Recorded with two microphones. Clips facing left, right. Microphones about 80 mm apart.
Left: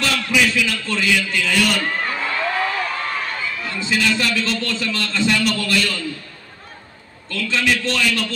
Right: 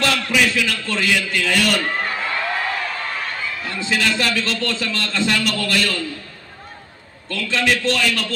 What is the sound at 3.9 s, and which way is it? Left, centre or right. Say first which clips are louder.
A man's voice: even; right.